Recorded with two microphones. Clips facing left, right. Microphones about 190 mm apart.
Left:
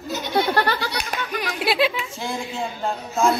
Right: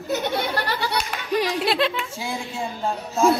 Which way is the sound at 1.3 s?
35° right (ahead or behind).